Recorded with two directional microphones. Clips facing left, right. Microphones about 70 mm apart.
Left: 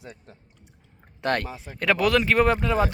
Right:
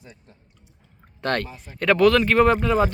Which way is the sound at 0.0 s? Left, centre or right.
Left.